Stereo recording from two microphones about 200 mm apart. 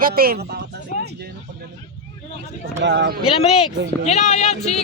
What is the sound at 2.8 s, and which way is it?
Speech, 60° right (ahead or behind).